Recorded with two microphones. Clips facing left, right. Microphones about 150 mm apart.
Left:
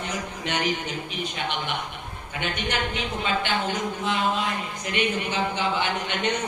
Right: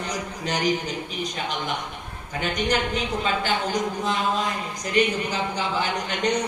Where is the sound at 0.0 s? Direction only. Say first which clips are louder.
Right 1 dB; 35° right (ahead or behind).